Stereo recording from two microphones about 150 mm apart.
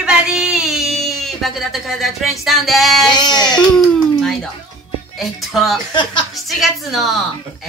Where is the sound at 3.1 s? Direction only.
30° left (ahead or behind).